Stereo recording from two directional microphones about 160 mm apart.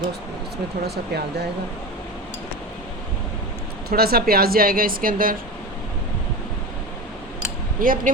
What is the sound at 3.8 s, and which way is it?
A woman's voice, 75° right (ahead or behind).